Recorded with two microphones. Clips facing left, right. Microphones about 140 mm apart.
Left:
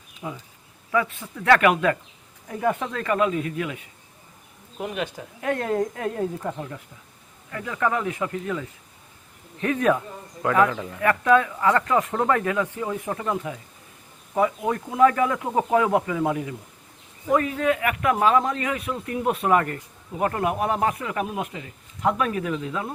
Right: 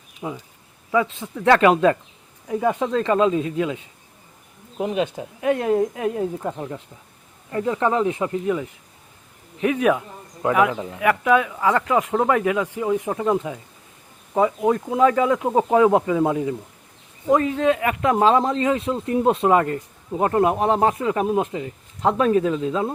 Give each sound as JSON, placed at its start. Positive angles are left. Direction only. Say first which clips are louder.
{"t": 0.2, "sound": "speech", "louder": "right 4 dB", "side_deg": -30}
{"t": 2.5, "sound": "speech", "louder": "right 4 dB", "side_deg": -15}